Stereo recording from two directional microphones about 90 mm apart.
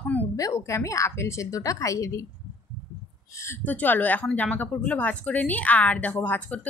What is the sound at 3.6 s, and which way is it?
A woman's voice, 20° left (ahead or behind).